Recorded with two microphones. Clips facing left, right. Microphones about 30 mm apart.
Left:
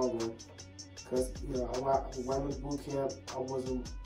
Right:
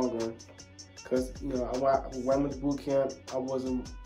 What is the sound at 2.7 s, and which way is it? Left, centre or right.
Speech, right.